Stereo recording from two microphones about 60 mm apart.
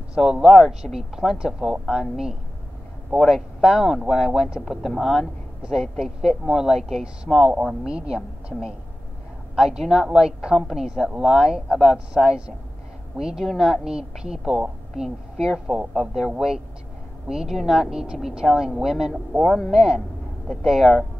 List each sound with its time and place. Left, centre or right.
0.1 s a woman's voice: centre
9.6 s a woman's voice: centre
12.3 s a woman's voice: centre